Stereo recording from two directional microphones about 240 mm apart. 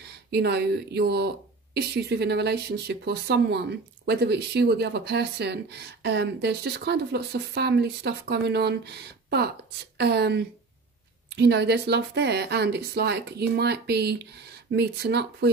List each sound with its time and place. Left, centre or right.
0.3 s speech: right